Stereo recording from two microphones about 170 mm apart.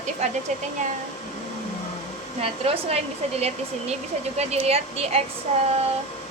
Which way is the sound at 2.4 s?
35° right (ahead or behind).